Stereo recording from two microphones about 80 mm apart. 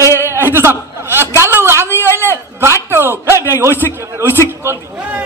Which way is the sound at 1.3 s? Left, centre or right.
Right.